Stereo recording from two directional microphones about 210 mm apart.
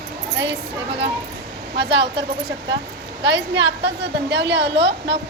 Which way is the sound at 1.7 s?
55° right (ahead or behind).